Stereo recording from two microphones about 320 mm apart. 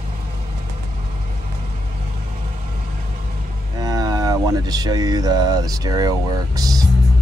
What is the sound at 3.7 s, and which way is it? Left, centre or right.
Speech, centre.